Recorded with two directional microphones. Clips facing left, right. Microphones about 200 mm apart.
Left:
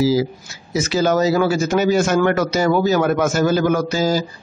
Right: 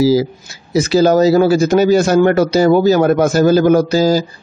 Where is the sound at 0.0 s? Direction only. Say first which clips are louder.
Right 4 dB; 40° right (ahead or behind).